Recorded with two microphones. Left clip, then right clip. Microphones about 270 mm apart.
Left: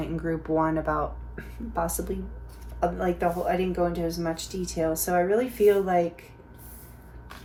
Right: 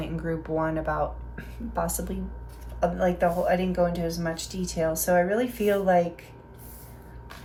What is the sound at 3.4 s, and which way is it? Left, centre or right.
Speech, centre.